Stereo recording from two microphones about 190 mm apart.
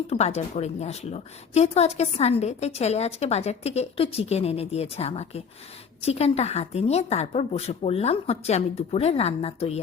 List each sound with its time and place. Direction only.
0.1 s a woman's voice: 35° left (ahead or behind)